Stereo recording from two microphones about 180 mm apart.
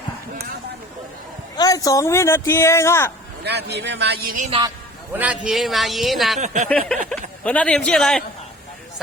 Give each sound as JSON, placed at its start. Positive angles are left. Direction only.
{"t": 1.5, "sound": "speech", "side_deg": 20}
{"t": 3.4, "sound": "a man's voice", "side_deg": -65}
{"t": 4.4, "sound": "a woman's voice", "side_deg": -35}
{"t": 5.1, "sound": "a man's voice", "side_deg": -5}
{"t": 6.4, "sound": "a woman's voice", "side_deg": -40}
{"t": 6.7, "sound": "a man's voice", "side_deg": 5}